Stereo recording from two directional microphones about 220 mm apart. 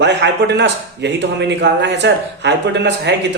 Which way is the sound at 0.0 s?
50° right (ahead or behind).